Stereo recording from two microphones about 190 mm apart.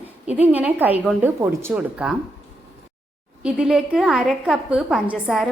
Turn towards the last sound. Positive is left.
turn(degrees=-5)  # may be behind; listen again after turning